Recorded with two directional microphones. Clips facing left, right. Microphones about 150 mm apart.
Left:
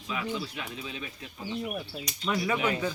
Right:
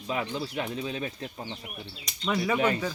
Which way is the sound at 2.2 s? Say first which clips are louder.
Right 2 dB; centre (ahead or behind).